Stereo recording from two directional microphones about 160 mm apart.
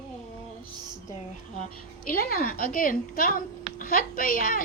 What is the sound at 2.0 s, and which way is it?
A woman's voice, 65° left (ahead or behind).